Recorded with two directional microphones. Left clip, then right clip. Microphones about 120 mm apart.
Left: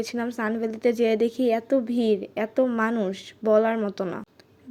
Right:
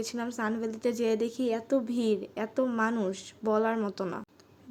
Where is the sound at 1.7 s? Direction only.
15° left (ahead or behind).